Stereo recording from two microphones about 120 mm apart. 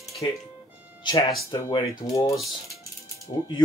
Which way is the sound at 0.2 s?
30° left (ahead or behind).